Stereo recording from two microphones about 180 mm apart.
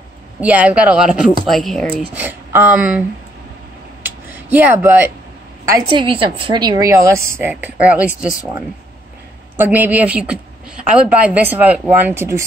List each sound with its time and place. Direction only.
0.4 s a woman's voice: 10° right (ahead or behind)
2.1 s speech: 10° right (ahead or behind)
4.0 s a sound: 10° right (ahead or behind)
5.7 s a woman's voice: 25° right (ahead or behind); by 8.3 s 5° right (ahead or behind)
9.6 s a woman's voice: 10° right (ahead or behind)